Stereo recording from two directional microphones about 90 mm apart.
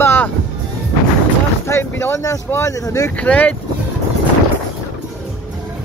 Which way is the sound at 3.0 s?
15° left (ahead or behind).